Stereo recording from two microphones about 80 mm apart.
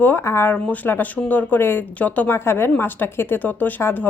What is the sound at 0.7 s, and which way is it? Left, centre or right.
Speech, left.